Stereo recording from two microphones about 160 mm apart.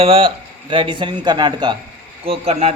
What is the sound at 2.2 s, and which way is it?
Speech, 40° right (ahead or behind).